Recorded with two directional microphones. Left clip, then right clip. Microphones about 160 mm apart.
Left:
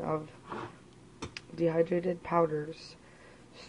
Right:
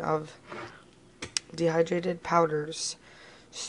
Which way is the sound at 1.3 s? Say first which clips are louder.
Right 3 dB; 25° right (ahead or behind).